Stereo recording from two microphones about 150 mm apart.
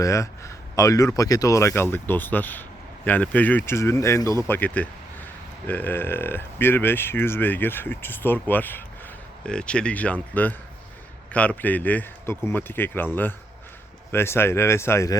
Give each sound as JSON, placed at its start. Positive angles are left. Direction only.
{"t": 0.0, "sound": "speech", "side_deg": 20}
{"t": 14.1, "sound": "speech", "side_deg": 15}